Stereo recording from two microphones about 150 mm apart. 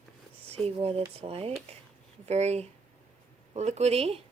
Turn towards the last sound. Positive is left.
turn(degrees=-45)  # may be behind; listen again after turning